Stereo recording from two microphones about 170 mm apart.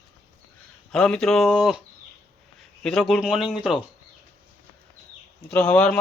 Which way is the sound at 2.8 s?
Centre (ahead or behind).